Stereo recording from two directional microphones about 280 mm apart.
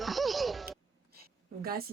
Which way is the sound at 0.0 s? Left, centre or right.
Centre.